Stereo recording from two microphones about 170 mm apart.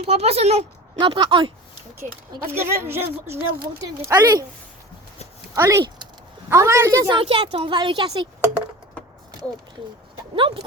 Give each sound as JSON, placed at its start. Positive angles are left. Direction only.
{"t": 0.0, "sound": "speech", "side_deg": -35}
{"t": 2.6, "sound": "speech", "side_deg": -15}
{"t": 5.5, "sound": "speech", "side_deg": -20}
{"t": 7.1, "sound": "speech", "side_deg": -30}
{"t": 10.3, "sound": "speech", "side_deg": -30}